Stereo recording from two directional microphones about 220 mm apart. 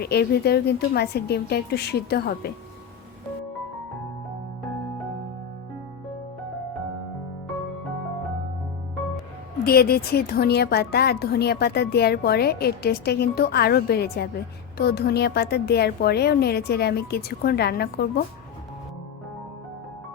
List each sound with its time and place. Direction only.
0.0 s a woman's voice: 45° left (ahead or behind)
9.6 s a woman's voice: 45° left (ahead or behind)